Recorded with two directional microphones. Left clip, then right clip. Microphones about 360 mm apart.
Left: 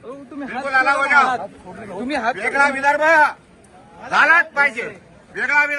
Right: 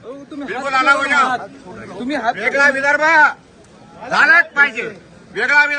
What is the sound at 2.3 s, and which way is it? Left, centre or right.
A man's voice, centre.